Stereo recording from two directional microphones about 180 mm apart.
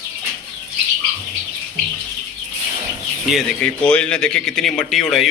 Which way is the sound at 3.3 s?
5° left (ahead or behind).